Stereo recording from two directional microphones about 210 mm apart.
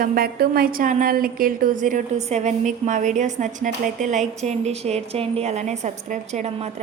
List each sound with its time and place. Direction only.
0.0 s a woman's voice: 45° right (ahead or behind)